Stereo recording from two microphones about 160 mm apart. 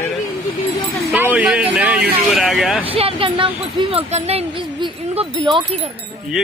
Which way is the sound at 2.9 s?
35° right (ahead or behind).